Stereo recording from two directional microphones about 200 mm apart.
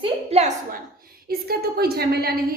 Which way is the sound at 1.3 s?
50° right (ahead or behind).